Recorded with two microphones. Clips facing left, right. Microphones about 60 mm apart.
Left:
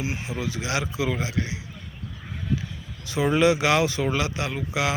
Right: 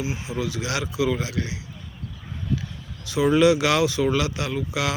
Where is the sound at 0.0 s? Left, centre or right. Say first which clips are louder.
Right 1 dB; left.